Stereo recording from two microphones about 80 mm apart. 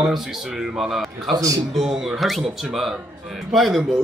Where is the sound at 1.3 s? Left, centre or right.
Right.